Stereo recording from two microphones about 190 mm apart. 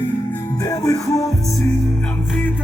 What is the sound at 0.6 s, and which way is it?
Music, 20° left (ahead or behind).